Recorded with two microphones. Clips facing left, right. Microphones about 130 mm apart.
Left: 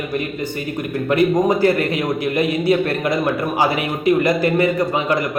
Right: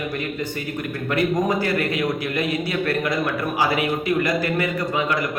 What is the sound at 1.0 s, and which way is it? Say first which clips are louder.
A man's voice: left 5 dB; 25° left (ahead or behind).